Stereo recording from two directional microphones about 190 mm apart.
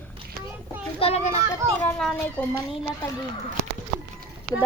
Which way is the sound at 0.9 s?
30° left (ahead or behind).